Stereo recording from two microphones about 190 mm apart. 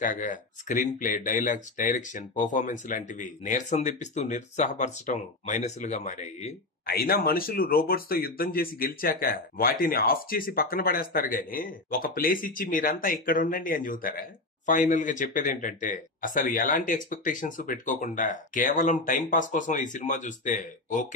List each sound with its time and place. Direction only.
0.0 s speech: 45° left (ahead or behind)